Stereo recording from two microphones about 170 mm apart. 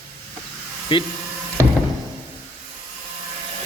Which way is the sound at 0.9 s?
30° left (ahead or behind).